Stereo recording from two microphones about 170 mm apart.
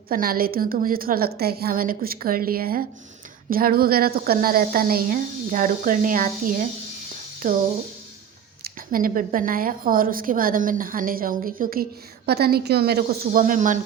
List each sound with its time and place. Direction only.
0.1 s a woman's voice: 60° right (ahead or behind)
8.6 s a woman's voice: 55° right (ahead or behind)